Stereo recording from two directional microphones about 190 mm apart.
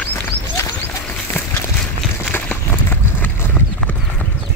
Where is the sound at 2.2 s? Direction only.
10° left (ahead or behind).